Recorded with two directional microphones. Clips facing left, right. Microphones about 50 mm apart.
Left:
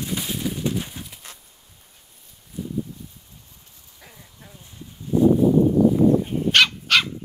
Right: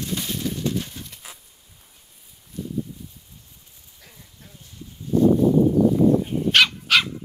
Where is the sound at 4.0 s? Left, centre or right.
Centre.